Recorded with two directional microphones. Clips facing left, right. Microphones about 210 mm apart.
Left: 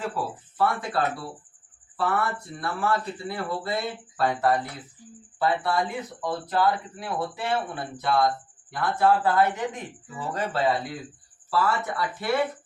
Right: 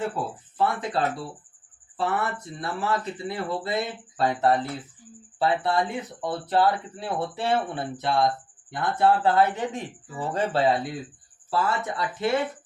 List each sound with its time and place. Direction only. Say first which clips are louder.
0.5 s speech: even; 20° right (ahead or behind)